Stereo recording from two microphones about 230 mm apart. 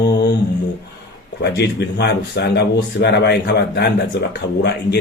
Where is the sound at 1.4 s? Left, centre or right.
Left.